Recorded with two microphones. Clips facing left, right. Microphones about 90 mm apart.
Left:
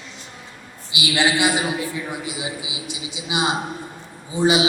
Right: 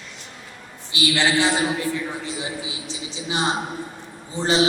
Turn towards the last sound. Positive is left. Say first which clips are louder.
# left 2 dB
turn(degrees=10)  # may be behind; listen again after turning